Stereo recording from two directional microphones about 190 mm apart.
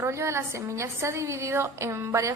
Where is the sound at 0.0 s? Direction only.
15° right (ahead or behind).